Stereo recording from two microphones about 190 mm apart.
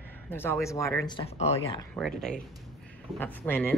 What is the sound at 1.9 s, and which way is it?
Speech, centre (ahead or behind).